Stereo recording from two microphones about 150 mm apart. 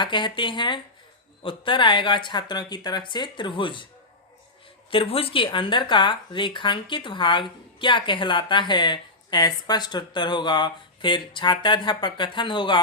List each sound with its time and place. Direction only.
0.0 s speech: 30° left (ahead or behind)
4.9 s speech: 40° left (ahead or behind)